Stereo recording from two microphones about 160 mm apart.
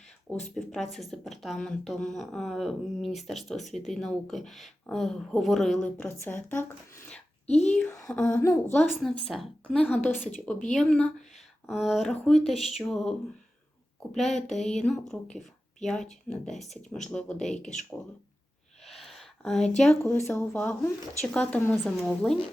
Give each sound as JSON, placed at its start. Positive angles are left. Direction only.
{"t": 0.3, "sound": "speech", "side_deg": 5}
{"t": 7.4, "sound": "speech", "side_deg": 45}
{"t": 7.7, "sound": "a woman's voice", "side_deg": 10}
{"t": 18.9, "sound": "speech", "side_deg": 0}